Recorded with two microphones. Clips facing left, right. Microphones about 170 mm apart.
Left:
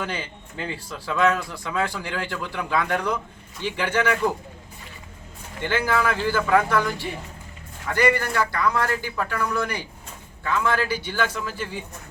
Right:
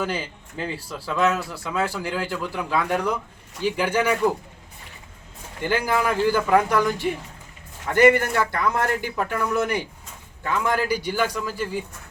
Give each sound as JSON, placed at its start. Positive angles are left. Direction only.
{"t": 0.0, "sound": "a man's voice", "side_deg": -5}
{"t": 5.6, "sound": "a man's voice", "side_deg": -15}